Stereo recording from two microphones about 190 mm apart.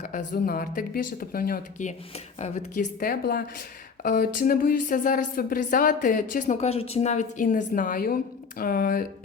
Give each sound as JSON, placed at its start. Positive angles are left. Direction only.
{"t": 0.0, "sound": "speech", "side_deg": 40}